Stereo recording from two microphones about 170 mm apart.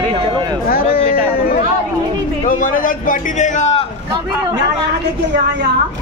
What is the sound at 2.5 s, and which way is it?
A man's voice, 50° left (ahead or behind).